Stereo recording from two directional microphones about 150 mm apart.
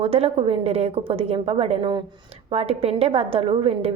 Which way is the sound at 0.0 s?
40° right (ahead or behind).